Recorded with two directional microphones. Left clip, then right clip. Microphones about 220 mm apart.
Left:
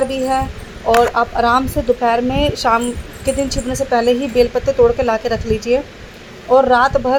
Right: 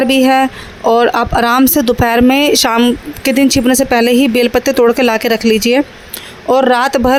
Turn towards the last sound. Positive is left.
turn(degrees=-50)  # may be behind; listen again after turning